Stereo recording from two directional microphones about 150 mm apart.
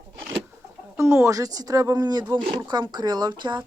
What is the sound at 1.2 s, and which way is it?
Speech, 20° right (ahead or behind).